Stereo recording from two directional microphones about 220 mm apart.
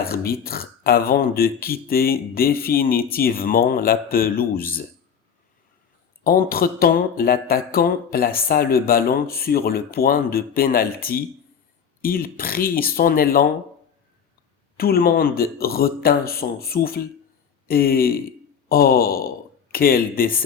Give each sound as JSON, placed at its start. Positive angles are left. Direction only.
{"t": 0.0, "sound": "speech", "side_deg": 45}
{"t": 6.2, "sound": "speech", "side_deg": 40}
{"t": 14.8, "sound": "speech", "side_deg": 45}